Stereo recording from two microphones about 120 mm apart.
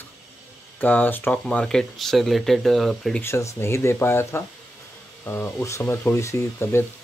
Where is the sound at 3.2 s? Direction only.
20° left (ahead or behind).